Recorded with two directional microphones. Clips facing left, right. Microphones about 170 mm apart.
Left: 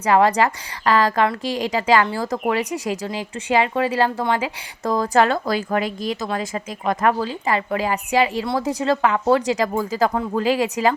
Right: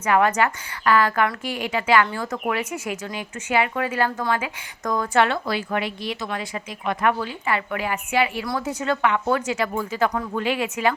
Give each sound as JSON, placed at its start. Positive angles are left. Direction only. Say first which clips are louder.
{"t": 0.0, "sound": "a woman's voice", "louder": "left 3 dB", "side_deg": 35}